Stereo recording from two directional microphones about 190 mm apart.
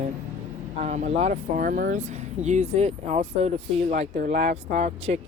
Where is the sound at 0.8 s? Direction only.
35° right (ahead or behind).